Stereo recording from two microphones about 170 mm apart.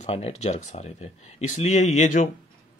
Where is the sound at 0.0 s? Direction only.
40° left (ahead or behind).